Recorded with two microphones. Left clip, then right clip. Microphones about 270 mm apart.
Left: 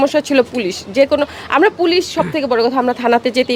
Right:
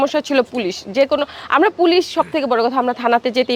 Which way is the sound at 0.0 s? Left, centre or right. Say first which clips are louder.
Left 3 dB; centre.